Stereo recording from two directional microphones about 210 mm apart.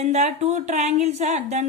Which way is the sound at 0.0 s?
30° right (ahead or behind).